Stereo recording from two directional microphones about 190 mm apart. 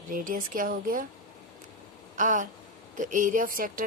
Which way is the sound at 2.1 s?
40° right (ahead or behind).